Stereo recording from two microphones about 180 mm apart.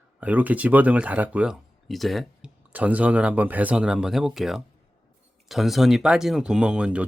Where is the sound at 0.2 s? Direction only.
10° right (ahead or behind).